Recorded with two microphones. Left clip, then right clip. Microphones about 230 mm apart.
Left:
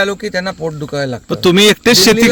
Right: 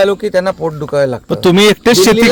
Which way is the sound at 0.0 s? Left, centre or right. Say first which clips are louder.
Right 5 dB; centre.